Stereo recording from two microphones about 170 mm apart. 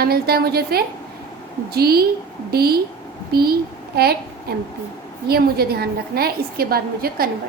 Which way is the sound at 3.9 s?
65° right (ahead or behind).